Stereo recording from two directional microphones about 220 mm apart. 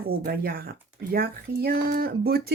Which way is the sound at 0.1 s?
45° right (ahead or behind).